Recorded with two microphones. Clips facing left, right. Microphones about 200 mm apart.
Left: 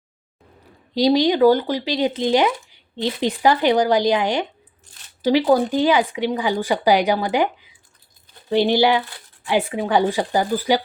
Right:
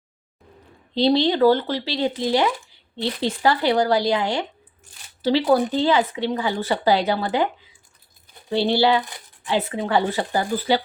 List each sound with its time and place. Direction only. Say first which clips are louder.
0.9 s speech: left 2 dB; 15° left (ahead or behind)
4.9 s a sound: right 3 dB; 10° right (ahead or behind)
5.2 s speech: left 2 dB; 15° left (ahead or behind)